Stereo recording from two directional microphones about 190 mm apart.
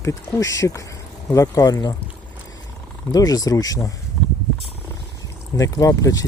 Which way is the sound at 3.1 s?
20° left (ahead or behind).